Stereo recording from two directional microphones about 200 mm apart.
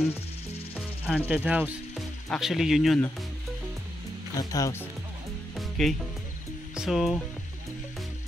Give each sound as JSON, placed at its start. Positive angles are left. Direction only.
{"t": 0.7, "sound": "sizzle", "side_deg": -5}
{"t": 1.3, "sound": "speech", "side_deg": -5}
{"t": 4.4, "sound": "speech", "side_deg": 15}
{"t": 5.6, "sound": "music", "side_deg": 0}
{"t": 6.7, "sound": "speech", "side_deg": 0}